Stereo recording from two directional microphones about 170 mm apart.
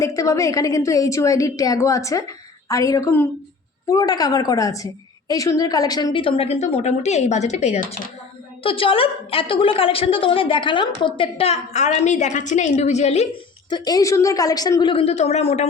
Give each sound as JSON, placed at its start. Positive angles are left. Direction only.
{"t": 0.0, "sound": "a woman's voice", "side_deg": 20}
{"t": 13.7, "sound": "a woman's voice", "side_deg": 25}